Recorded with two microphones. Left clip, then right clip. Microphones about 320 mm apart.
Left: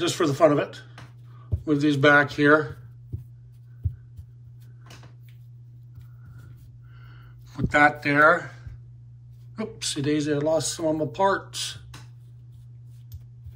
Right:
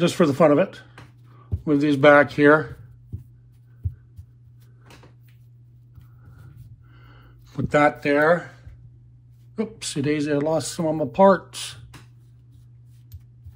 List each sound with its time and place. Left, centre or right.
0.0 s speech: centre
7.5 s speech: centre
9.6 s speech: centre